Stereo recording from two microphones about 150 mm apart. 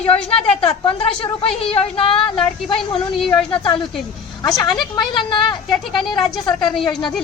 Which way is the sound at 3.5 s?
35° left (ahead or behind).